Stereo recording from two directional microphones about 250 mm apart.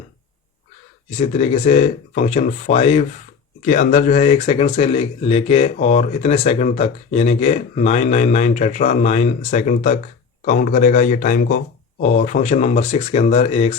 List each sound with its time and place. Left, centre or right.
1.2 s a man's voice: left